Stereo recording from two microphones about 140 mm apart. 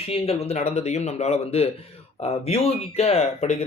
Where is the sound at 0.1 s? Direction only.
45° left (ahead or behind).